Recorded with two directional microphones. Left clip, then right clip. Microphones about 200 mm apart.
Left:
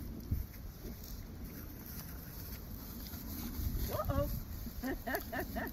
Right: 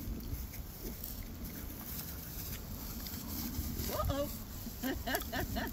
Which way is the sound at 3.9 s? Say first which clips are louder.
Even; 25° left (ahead or behind).